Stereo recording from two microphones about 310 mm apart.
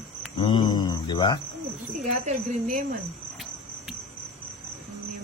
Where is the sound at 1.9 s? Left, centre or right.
Right.